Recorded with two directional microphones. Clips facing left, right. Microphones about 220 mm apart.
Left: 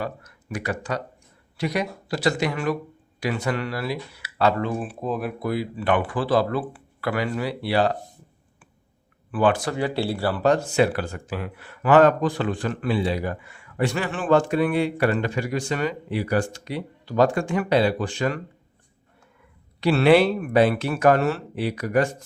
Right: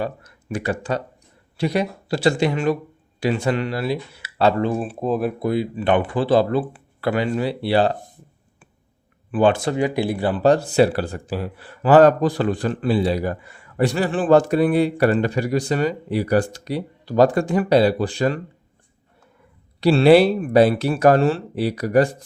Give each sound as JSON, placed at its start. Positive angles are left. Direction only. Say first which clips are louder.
{"t": 0.0, "sound": "speech", "louder": "right 4 dB", "side_deg": -30}
{"t": 9.3, "sound": "speech", "louder": "right 4 dB", "side_deg": -25}
{"t": 9.7, "sound": "speech", "louder": "right 4 dB", "side_deg": -15}
{"t": 10.4, "sound": "speech", "louder": "right 4 dB", "side_deg": -35}
{"t": 19.8, "sound": "speech", "louder": "right 4 dB", "side_deg": -30}